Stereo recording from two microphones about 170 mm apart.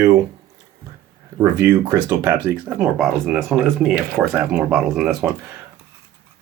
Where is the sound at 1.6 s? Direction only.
10° right (ahead or behind).